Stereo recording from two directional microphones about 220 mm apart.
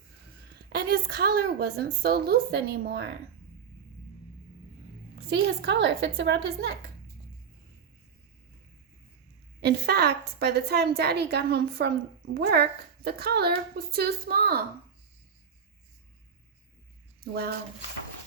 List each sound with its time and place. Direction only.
0.7 s a woman's voice: 45° right (ahead or behind)
5.1 s a woman's voice: 50° right (ahead or behind)
9.6 s a woman's voice: 45° right (ahead or behind)
17.2 s speech: 45° right (ahead or behind)